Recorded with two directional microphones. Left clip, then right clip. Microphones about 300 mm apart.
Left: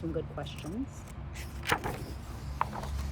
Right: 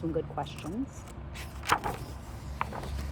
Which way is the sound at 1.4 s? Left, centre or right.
Centre.